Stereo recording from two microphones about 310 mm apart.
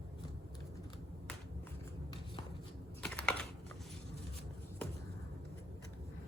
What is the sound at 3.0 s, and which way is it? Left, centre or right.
Typing, centre.